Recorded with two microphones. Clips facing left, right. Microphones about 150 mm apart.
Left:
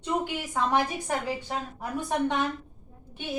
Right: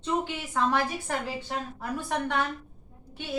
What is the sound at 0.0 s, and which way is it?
A woman's voice, 15° left (ahead or behind).